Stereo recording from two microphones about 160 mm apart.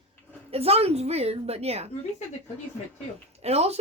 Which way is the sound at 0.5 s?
40° right (ahead or behind).